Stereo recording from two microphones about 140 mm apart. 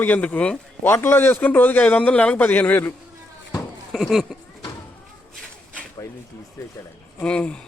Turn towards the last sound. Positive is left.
turn(degrees=10)  # may be behind; listen again after turning